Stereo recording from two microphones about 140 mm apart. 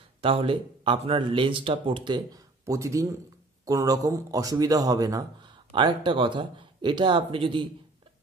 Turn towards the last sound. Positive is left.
turn(degrees=-40)  # may be behind; listen again after turning